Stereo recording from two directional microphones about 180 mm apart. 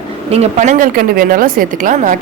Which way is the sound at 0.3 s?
40° right (ahead or behind).